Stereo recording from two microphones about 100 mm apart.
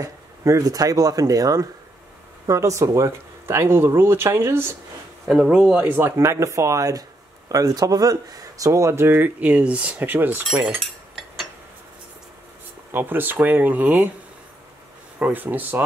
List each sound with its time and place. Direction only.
0.0 s speech: 35° right (ahead or behind)
5.3 s speech: 5° right (ahead or behind)
5.9 s speech: 20° right (ahead or behind)
10.5 s speech: 10° right (ahead or behind)
12.9 s speech: 20° right (ahead or behind)
15.1 s speech: 15° right (ahead or behind)